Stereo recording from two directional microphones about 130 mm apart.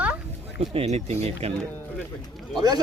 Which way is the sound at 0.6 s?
45° right (ahead or behind).